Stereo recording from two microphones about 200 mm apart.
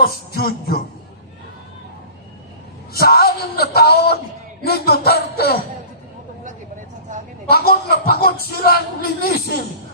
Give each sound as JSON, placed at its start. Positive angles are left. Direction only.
{"t": 0.0, "sound": "speech", "side_deg": 50}
{"t": 2.9, "sound": "a man's voice", "side_deg": 50}
{"t": 7.4, "sound": "speech", "side_deg": 50}